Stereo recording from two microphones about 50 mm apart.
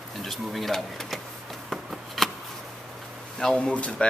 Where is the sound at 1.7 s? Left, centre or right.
Centre.